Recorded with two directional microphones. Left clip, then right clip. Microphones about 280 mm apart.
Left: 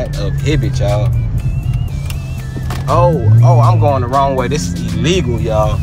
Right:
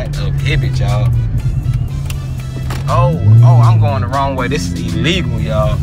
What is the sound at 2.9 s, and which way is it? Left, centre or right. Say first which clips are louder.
Speech: left 3 dB; left.